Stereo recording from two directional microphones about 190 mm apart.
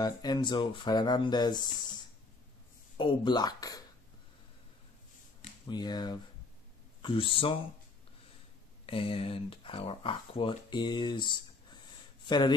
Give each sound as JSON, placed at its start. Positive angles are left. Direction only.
{"t": 0.0, "sound": "speech", "side_deg": 20}
{"t": 3.0, "sound": "speech", "side_deg": 25}
{"t": 5.4, "sound": "speech", "side_deg": 20}
{"t": 8.8, "sound": "speech", "side_deg": 30}